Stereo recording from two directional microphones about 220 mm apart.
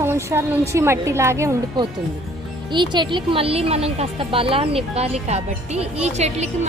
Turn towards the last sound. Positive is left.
turn(degrees=-30)  # may be behind; listen again after turning